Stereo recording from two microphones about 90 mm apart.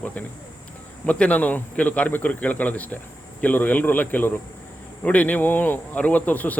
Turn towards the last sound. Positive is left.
turn(degrees=20)  # may be behind; listen again after turning